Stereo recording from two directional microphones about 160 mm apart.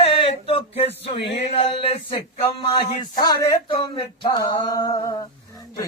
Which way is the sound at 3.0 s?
25° left (ahead or behind).